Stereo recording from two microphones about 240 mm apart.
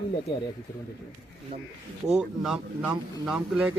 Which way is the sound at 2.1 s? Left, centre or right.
Centre.